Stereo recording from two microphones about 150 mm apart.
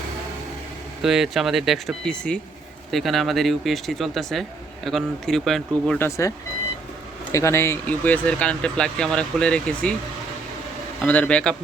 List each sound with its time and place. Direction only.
1.0 s speech: centre (ahead or behind)
5.9 s speech: 15° left (ahead or behind)
7.3 s speech: 20° left (ahead or behind)
11.0 s speech: 10° left (ahead or behind)